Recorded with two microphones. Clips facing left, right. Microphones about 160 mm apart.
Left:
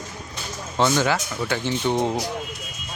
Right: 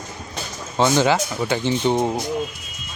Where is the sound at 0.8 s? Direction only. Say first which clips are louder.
Right 3 dB; 20° right (ahead or behind).